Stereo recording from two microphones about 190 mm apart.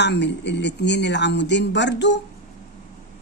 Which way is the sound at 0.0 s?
65° left (ahead or behind).